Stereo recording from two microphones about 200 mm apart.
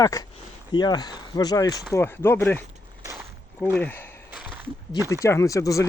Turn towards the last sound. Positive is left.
turn(degrees=15)  # may be behind; listen again after turning